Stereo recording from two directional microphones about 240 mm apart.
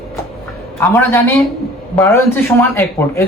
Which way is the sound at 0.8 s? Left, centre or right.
Centre.